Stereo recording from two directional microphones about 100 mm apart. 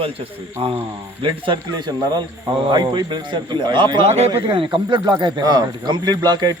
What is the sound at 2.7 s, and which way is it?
Speech, 45° right (ahead or behind).